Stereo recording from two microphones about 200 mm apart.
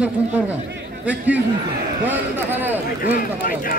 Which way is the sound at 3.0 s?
45° left (ahead or behind).